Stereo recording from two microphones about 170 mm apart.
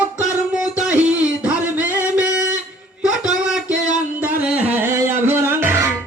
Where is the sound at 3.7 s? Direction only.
45° right (ahead or behind).